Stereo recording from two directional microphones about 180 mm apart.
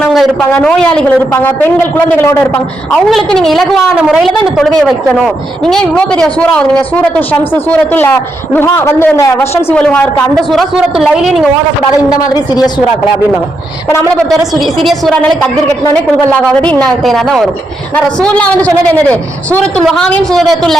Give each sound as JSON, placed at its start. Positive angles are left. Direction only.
{"t": 0.1, "sound": "a sound", "side_deg": 0}
{"t": 0.5, "sound": "a woman's voice", "side_deg": 5}
{"t": 12.1, "sound": "a man's voice", "side_deg": 20}
{"t": 14.3, "sound": "a woman's voice", "side_deg": 0}